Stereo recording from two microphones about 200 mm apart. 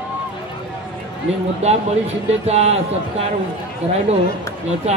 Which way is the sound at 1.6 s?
30° right (ahead or behind).